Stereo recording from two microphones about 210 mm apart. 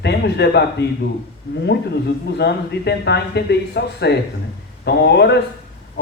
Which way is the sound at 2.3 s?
50° left (ahead or behind).